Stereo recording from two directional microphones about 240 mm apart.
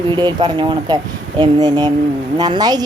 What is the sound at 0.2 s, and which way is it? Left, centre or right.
A woman's voice, centre.